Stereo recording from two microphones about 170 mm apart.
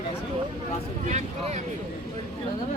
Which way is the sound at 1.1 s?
40° right (ahead or behind).